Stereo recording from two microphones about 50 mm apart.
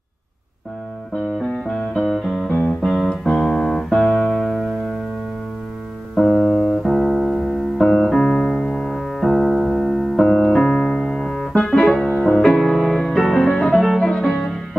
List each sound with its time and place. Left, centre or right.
1.5 s music: centre
2.4 s music: centre
3.3 s music: centre
4.5 s music: centre
6.1 s music: centre
8.8 s music: centre
10.2 s piano: centre
11.5 s music: centre
12.4 s music: centre